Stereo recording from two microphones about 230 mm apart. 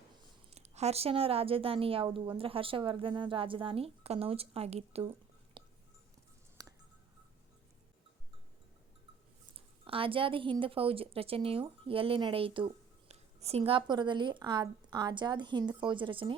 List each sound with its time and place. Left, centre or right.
0.5 s a woman's voice: right
5.6 s a sound: right
9.8 s a woman's voice: right